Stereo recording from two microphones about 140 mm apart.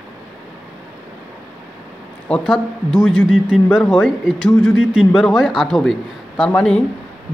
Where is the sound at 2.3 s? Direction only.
5° left (ahead or behind).